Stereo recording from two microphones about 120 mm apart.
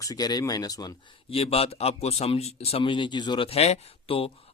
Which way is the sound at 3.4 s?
60° left (ahead or behind).